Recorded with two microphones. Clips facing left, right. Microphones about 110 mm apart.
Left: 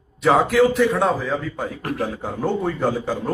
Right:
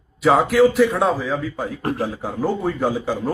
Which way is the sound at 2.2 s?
5° right (ahead or behind).